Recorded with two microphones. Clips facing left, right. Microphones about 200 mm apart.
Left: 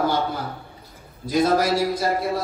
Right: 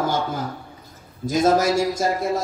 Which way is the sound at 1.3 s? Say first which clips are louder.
Right 1 dB; 45° right (ahead or behind).